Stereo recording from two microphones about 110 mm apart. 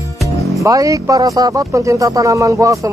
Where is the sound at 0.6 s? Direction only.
30° right (ahead or behind).